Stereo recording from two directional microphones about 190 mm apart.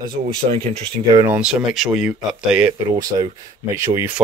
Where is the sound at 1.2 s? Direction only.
10° right (ahead or behind).